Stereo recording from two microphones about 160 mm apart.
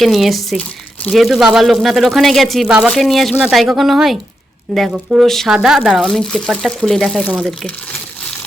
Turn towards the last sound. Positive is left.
turn(degrees=5)  # may be behind; listen again after turning